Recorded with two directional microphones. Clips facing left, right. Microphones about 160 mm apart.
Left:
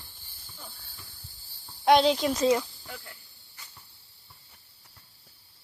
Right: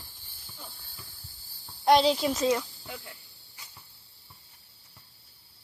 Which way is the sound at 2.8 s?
10° right (ahead or behind).